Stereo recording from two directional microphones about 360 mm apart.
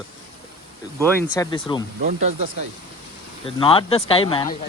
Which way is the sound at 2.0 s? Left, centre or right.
Centre.